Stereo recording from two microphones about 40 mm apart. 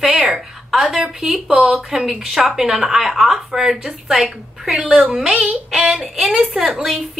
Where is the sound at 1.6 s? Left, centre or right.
Right.